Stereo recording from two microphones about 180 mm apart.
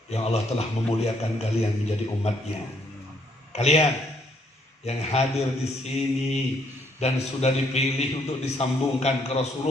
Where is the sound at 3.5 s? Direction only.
35° left (ahead or behind).